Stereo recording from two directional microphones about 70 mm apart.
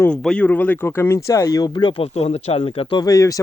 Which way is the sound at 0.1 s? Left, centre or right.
Centre.